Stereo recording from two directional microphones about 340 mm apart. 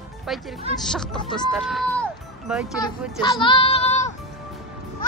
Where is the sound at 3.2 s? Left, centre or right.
Centre.